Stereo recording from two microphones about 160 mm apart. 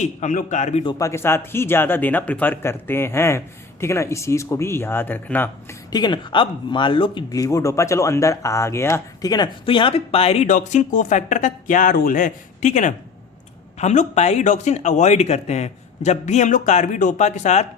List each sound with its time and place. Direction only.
0.0 s speech: 50° left (ahead or behind)
0.9 s speech: 20° left (ahead or behind)
5.9 s speech: 30° left (ahead or behind); by 17.7 s 45° left (ahead or behind)